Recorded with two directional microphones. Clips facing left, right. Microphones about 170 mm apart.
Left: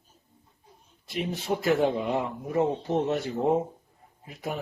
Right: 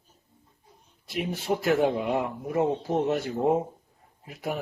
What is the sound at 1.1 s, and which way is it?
Speech, centre (ahead or behind).